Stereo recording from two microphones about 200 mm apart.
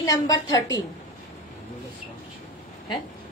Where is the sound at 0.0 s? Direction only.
20° left (ahead or behind).